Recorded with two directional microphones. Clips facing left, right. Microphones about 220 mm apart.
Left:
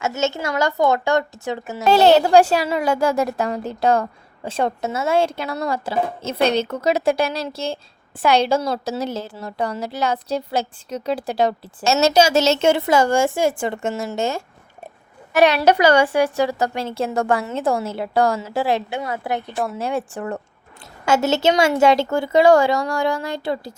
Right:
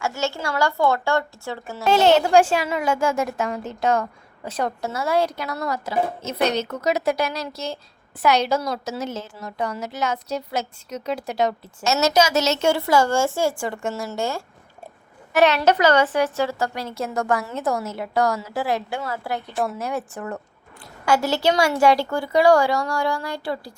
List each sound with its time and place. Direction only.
0.0 s a woman's voice: 20° left (ahead or behind)
1.9 s a woman's voice: 35° left (ahead or behind)